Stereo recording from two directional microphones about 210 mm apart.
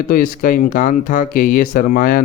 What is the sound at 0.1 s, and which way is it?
Speech, 40° left (ahead or behind).